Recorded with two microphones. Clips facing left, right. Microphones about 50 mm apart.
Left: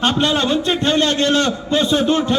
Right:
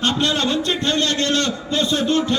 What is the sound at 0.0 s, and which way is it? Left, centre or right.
A man's voice, centre.